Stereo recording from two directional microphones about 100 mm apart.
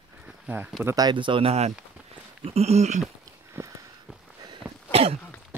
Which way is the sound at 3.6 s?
20° right (ahead or behind).